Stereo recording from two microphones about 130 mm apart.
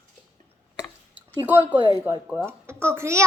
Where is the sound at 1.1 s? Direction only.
15° right (ahead or behind).